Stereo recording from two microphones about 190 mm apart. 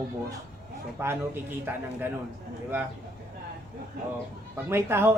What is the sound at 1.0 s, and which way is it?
Speech, 10° right (ahead or behind).